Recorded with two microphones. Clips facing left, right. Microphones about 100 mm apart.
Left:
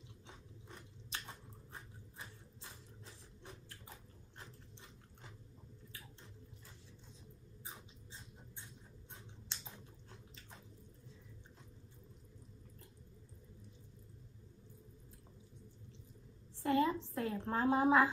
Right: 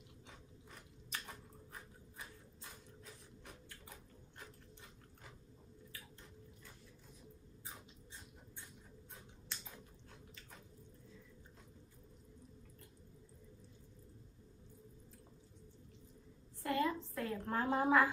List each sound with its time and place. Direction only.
1.2 s a sound: 30° left (ahead or behind)
9.1 s scissors: 25° left (ahead or behind)
16.6 s a woman's voice: 25° left (ahead or behind)